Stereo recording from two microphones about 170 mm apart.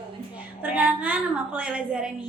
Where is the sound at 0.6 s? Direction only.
10° right (ahead or behind).